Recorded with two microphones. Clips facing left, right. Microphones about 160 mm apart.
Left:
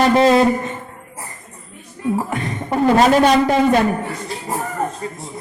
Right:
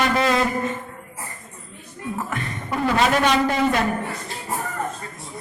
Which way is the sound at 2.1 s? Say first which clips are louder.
Left 6 dB; 35° left (ahead or behind).